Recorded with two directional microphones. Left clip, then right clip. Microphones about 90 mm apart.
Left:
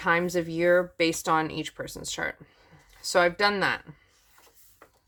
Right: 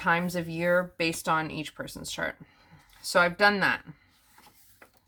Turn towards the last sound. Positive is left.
turn(degrees=30)  # may be behind; listen again after turning